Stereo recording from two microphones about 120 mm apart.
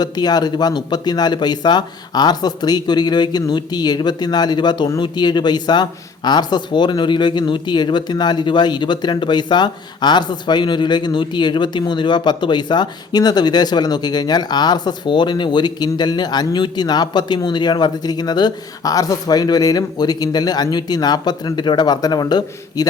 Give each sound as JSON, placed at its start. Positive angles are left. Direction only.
{"t": 0.0, "sound": "speech", "side_deg": 35}